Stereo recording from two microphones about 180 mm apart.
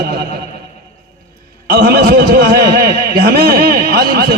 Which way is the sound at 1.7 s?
65° right (ahead or behind).